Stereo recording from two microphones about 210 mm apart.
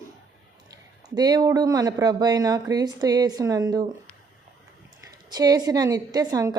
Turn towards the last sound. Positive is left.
turn(degrees=-15)  # may be behind; listen again after turning